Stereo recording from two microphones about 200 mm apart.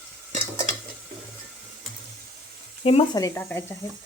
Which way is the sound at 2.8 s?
30° left (ahead or behind).